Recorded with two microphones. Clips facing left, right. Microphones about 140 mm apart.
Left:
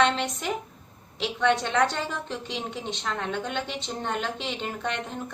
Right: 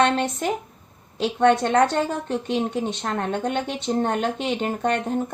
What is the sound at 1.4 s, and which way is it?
Speech, 50° right (ahead or behind).